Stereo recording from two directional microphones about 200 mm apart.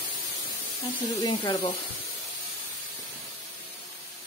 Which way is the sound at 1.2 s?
25° left (ahead or behind).